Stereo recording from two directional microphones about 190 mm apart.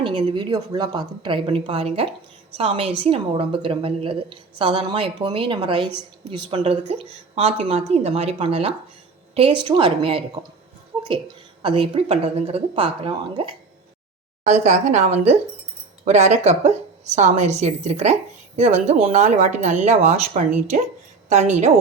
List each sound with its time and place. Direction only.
0.0 s a woman's voice: 25° right (ahead or behind)
11.6 s a woman's voice: 30° right (ahead or behind)
14.4 s a woman's voice: 40° right (ahead or behind)